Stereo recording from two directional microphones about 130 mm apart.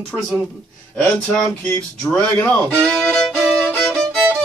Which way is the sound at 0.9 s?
5° left (ahead or behind).